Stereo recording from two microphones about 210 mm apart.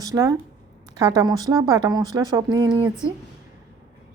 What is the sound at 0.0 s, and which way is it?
Speech, 15° right (ahead or behind).